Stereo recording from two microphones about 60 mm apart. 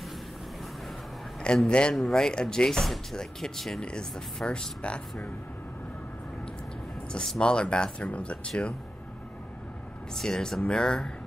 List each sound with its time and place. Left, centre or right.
1.4 s speech: centre
3.8 s speech: centre
7.1 s speech: centre
10.1 s speech: centre